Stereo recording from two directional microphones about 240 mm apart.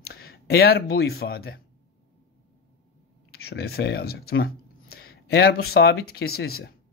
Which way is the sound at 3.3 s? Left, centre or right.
Left.